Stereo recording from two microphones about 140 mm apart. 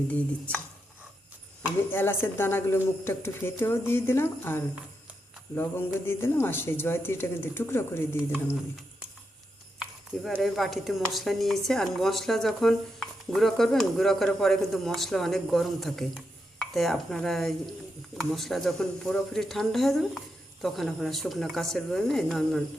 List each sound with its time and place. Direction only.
0.1 s a woman's voice: 10° left (ahead or behind)
1.9 s a woman's voice: 15° left (ahead or behind)
10.2 s speech: centre (ahead or behind)